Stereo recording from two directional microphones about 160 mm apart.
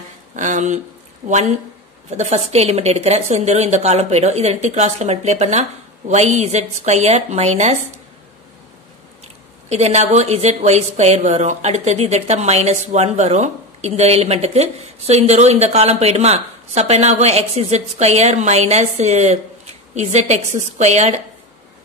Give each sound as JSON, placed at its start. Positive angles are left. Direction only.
{"t": 0.4, "sound": "a woman's voice", "side_deg": -50}
{"t": 9.7, "sound": "a woman's voice", "side_deg": -45}